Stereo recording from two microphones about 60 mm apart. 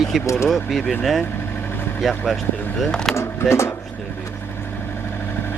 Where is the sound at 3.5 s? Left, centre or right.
Left.